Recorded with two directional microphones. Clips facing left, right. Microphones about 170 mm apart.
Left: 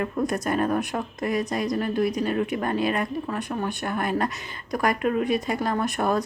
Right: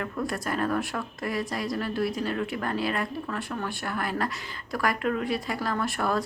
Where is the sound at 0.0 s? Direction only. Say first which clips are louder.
Left 5 dB; 20° left (ahead or behind).